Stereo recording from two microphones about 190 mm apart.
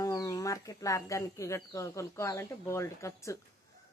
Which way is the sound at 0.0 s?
20° left (ahead or behind).